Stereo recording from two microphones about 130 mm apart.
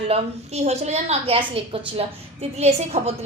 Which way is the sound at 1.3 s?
45° right (ahead or behind).